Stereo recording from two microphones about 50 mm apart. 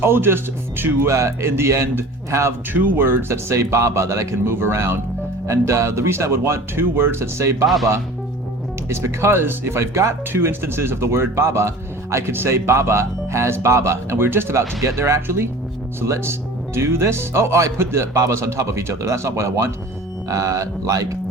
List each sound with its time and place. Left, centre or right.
0.0 s speech: right
1.0 s speech: right
2.7 s speech: right
3.0 s speech: right
4.4 s speech: right
5.5 s speech: right
8.9 s speech: right
12.1 s speech: right
14.3 s speech: right
14.5 s speech: right
20.4 s speech: right